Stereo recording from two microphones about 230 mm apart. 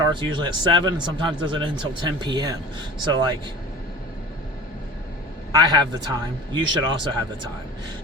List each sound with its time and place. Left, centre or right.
0.0 s speech: centre
5.5 s speech: centre